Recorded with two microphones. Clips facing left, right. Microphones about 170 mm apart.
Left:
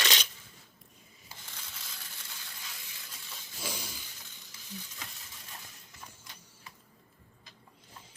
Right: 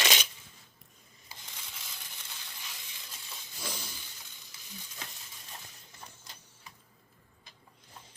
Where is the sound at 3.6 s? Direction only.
10° left (ahead or behind).